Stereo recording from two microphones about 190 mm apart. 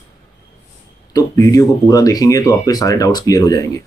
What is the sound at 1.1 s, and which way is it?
Speech, 15° left (ahead or behind).